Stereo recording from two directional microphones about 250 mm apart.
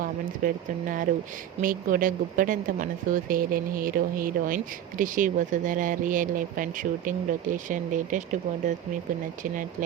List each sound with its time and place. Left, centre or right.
0.0 s speech: right